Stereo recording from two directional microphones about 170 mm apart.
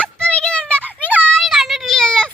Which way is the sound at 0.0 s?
5° left (ahead or behind).